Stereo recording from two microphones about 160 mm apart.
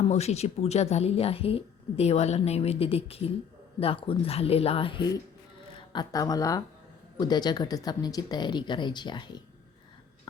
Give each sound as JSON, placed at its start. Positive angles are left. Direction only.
{"t": 0.1, "sound": "a woman's voice", "side_deg": 45}